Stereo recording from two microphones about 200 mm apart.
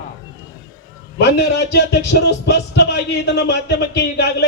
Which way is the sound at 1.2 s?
55° left (ahead or behind).